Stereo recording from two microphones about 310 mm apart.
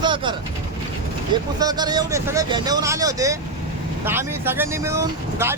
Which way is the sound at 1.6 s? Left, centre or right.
Centre.